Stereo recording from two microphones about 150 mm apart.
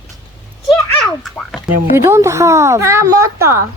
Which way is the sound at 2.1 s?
20° right (ahead or behind).